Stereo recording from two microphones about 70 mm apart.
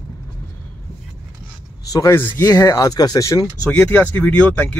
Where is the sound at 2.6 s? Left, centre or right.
Left.